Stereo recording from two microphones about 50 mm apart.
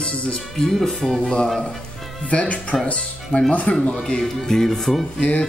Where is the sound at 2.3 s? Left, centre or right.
Left.